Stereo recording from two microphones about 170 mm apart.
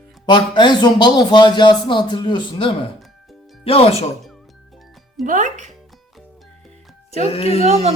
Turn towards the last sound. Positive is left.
turn(degrees=35)  # may be behind; listen again after turning